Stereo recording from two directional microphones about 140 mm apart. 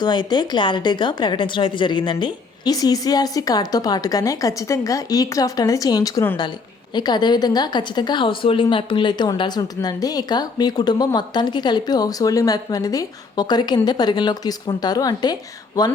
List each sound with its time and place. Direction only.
0.0 s a woman's voice: 30° left (ahead or behind)